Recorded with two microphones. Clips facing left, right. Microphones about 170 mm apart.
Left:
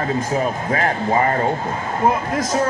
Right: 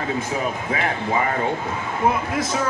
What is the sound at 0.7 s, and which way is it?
Speech, 45° left (ahead or behind).